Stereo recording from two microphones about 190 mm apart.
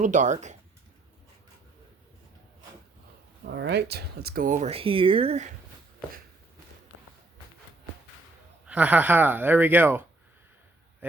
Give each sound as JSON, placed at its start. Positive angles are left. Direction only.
{"t": 0.0, "sound": "speech", "side_deg": -40}
{"t": 3.4, "sound": "speech", "side_deg": -60}
{"t": 8.6, "sound": "speech", "side_deg": -5}